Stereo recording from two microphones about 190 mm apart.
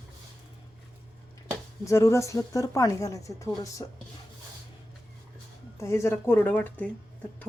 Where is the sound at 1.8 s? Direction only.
15° left (ahead or behind).